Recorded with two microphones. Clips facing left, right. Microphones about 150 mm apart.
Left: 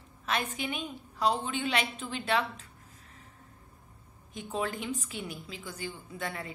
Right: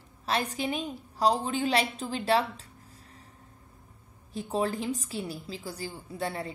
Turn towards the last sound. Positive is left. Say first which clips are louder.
# right 4 dB
turn(degrees=-30)  # may be behind; listen again after turning